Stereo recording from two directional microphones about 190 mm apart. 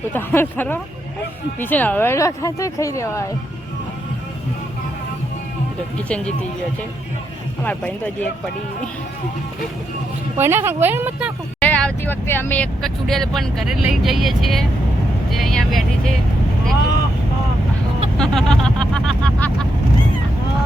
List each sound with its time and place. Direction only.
0.1 s speech: 10° left (ahead or behind)
6.1 s speech: 5° left (ahead or behind)
7.6 s speech: 10° left (ahead or behind)
10.3 s speech: 10° right (ahead or behind)
11.6 s speech: 5° left (ahead or behind)
18.2 s speech: 5° left (ahead or behind)